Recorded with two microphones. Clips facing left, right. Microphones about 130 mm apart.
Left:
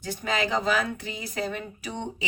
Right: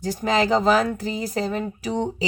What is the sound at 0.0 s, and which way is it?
Speech, 40° right (ahead or behind).